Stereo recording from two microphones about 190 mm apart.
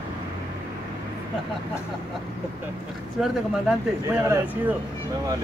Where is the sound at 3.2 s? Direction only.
5° right (ahead or behind).